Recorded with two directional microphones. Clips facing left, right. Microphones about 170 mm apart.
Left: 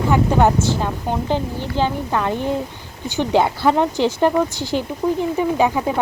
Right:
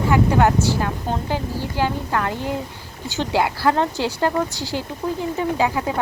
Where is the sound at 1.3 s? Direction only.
20° left (ahead or behind).